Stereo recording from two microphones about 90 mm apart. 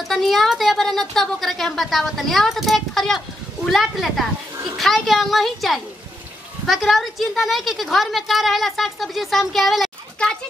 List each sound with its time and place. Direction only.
0.1 s a woman's voice: centre (ahead or behind)